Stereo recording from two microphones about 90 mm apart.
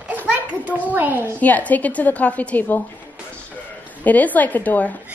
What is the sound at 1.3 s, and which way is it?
A woman's voice, 15° left (ahead or behind).